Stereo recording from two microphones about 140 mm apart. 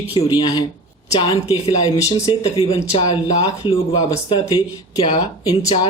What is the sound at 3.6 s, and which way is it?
Speech, 35° left (ahead or behind).